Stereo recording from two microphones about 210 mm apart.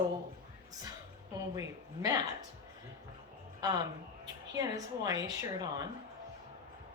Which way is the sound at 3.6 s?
20° right (ahead or behind).